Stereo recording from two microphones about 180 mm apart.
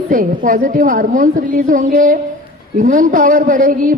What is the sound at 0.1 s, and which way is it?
A woman's voice, 50° right (ahead or behind).